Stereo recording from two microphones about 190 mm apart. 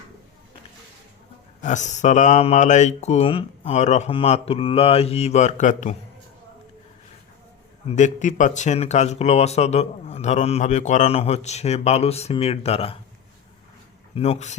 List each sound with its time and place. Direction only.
1.6 s speech: 40° left (ahead or behind)
7.9 s speech: 40° left (ahead or behind)
14.2 s speech: 35° left (ahead or behind)